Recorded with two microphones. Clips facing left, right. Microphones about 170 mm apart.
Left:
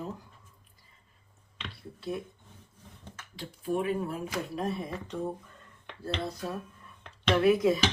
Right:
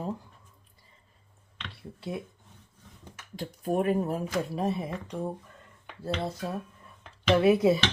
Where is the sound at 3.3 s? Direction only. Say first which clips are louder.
Right 3 dB; 45° right (ahead or behind).